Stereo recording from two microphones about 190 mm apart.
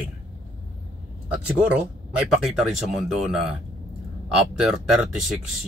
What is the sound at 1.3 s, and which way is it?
Speech, 5° right (ahead or behind).